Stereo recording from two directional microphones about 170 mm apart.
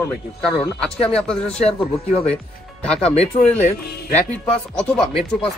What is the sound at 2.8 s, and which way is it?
Speech, 5° left (ahead or behind).